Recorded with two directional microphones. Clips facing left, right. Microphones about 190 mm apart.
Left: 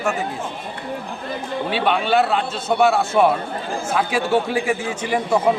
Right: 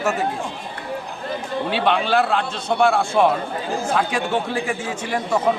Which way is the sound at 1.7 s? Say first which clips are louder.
Left 1 dB; 5° left (ahead or behind).